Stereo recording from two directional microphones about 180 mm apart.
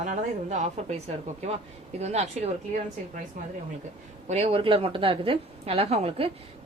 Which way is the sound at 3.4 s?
50° right (ahead or behind).